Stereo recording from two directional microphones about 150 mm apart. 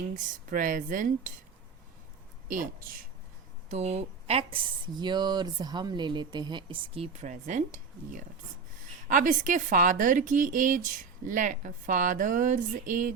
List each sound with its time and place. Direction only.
0.2 s a woman's voice: 60° right (ahead or behind)
2.5 s a woman's voice: 65° right (ahead or behind)
3.7 s a woman's voice: 45° right (ahead or behind)
4.9 s a woman's voice: 30° right (ahead or behind); by 13.1 s 60° right (ahead or behind)